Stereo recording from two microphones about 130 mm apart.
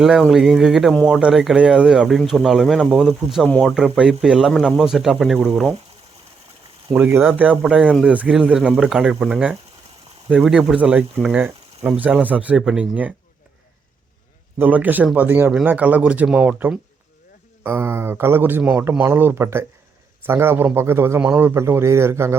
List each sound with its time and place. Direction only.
0.0 s speech: centre (ahead or behind)
6.9 s speech: 15° right (ahead or behind)
14.6 s a man's voice: 15° right (ahead or behind)